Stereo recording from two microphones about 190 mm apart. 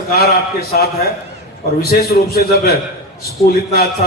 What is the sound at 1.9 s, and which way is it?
A man's voice, 55° left (ahead or behind).